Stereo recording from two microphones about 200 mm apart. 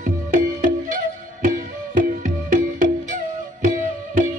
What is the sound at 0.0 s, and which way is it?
Music, 40° right (ahead or behind).